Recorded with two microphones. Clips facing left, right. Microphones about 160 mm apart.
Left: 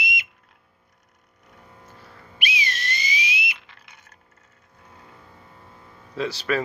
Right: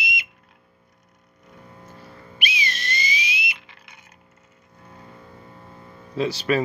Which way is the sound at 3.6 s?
5° right (ahead or behind).